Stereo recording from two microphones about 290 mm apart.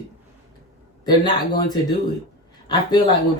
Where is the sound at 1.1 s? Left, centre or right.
Centre.